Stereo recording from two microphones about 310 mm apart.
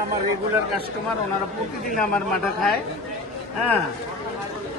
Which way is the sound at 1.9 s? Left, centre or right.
Centre.